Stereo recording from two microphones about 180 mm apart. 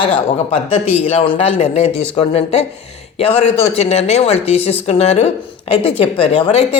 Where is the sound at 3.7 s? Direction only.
35° left (ahead or behind).